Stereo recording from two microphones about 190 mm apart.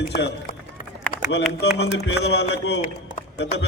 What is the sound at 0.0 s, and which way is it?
Speech, 65° left (ahead or behind).